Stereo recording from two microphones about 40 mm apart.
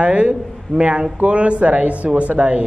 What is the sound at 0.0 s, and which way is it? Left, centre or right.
A woman's voice, right.